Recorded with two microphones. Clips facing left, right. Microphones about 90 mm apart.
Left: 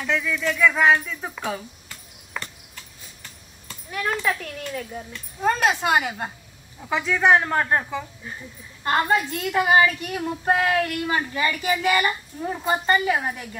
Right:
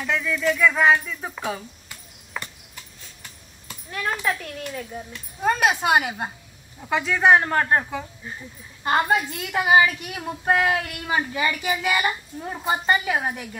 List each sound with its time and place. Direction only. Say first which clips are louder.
0.0 s speech: right 1 dB; centre (ahead or behind)
1.4 s horse: even; 5° right (ahead or behind)
4.0 s speech: left 1 dB; 10° right (ahead or behind)
7.1 s speech: right 1 dB; 5° right (ahead or behind)
8.8 s speech: even; 15° right (ahead or behind)